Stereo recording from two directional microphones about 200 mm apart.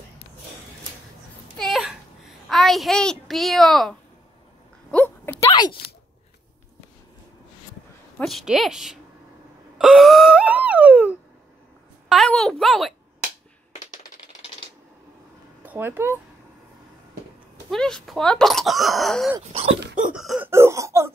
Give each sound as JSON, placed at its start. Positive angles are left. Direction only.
{"t": 1.6, "sound": "a sound", "side_deg": 0}
{"t": 4.9, "sound": "a sound", "side_deg": 5}
{"t": 5.4, "sound": "a sound", "side_deg": 25}
{"t": 8.2, "sound": "speech", "side_deg": 0}
{"t": 9.8, "sound": "wail", "side_deg": 0}
{"t": 12.1, "sound": "speech", "side_deg": 0}
{"t": 15.6, "sound": "speech", "side_deg": -10}
{"t": 17.6, "sound": "speech", "side_deg": 5}
{"t": 20.0, "sound": "cough", "side_deg": -5}